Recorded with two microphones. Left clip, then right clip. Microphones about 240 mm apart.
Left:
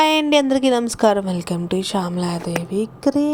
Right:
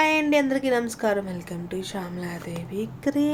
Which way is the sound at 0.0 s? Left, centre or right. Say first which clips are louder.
Left 5 dB; left.